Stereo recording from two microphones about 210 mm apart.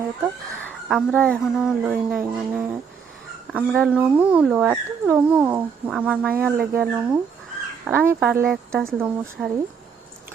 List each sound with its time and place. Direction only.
0.9 s speech: centre (ahead or behind)